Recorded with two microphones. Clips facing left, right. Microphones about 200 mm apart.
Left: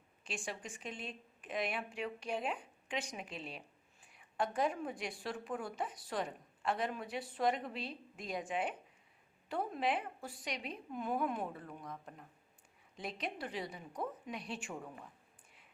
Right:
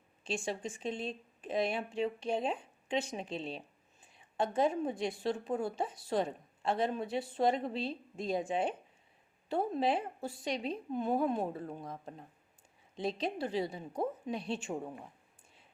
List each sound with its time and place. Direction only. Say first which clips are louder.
0.3 s a woman's voice: right 7 dB; 25° right (ahead or behind)